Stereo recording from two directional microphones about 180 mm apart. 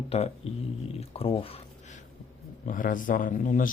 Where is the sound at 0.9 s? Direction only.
30° left (ahead or behind).